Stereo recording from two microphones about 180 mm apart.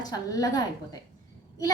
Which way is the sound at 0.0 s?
20° left (ahead or behind).